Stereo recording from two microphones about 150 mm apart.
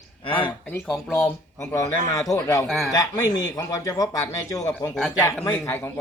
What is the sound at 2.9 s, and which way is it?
A man's voice, 25° left (ahead or behind).